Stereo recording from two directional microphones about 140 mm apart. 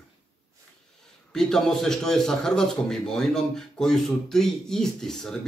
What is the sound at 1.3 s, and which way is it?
A man's voice, 5° left (ahead or behind).